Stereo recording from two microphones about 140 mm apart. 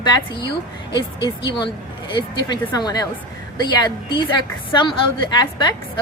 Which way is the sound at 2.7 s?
30° left (ahead or behind).